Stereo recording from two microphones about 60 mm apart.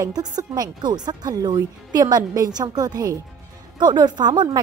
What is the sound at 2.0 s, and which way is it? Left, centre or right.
Speech, right.